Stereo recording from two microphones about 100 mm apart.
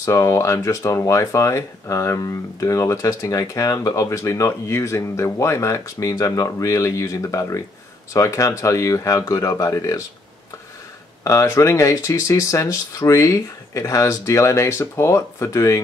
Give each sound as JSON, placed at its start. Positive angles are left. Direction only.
{"t": 0.0, "sound": "speech", "side_deg": 30}
{"t": 11.2, "sound": "speech", "side_deg": 30}